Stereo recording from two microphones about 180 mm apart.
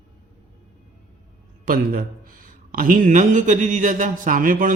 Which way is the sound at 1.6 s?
55° right (ahead or behind).